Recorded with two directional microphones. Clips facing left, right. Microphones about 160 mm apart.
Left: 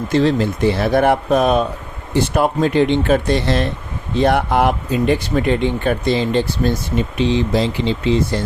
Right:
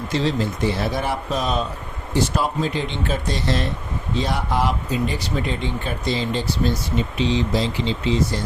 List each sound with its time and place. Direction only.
0.1 s speech: 55° left (ahead or behind)